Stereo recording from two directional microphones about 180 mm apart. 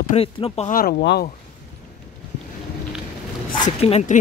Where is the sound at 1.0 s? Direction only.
70° left (ahead or behind).